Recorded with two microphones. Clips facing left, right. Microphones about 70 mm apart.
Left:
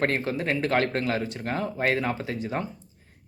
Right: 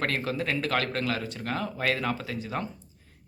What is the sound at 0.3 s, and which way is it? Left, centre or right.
Speech, left.